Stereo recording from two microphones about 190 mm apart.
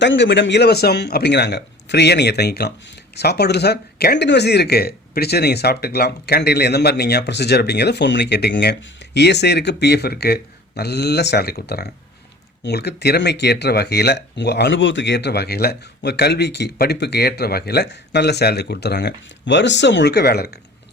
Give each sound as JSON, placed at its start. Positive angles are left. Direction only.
{"t": 0.0, "sound": "speech", "side_deg": 70}